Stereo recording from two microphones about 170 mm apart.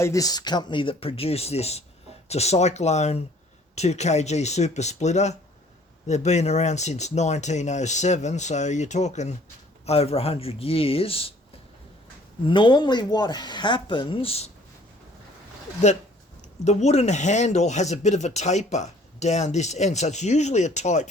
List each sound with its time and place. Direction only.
0.0 s speech: 20° left (ahead or behind)
12.5 s speech: 25° left (ahead or behind)
16.6 s speech: 40° left (ahead or behind)